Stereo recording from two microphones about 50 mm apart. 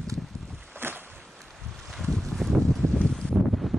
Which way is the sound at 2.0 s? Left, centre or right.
Centre.